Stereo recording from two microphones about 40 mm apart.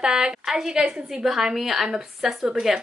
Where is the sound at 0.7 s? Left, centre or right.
Centre.